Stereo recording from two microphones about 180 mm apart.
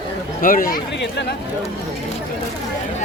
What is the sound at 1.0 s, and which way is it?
Speech, 70° left (ahead or behind).